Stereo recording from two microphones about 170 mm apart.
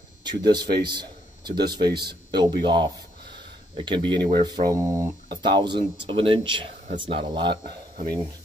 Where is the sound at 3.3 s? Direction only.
25° right (ahead or behind).